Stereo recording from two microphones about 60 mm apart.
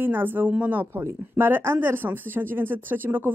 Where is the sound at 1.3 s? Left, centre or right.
Right.